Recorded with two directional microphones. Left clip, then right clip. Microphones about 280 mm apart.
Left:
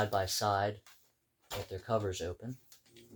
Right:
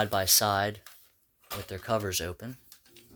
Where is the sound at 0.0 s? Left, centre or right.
Right.